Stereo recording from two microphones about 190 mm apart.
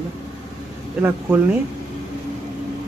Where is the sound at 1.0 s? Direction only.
10° right (ahead or behind).